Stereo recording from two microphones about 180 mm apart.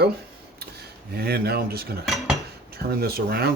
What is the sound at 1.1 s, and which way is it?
Speech, 60° right (ahead or behind).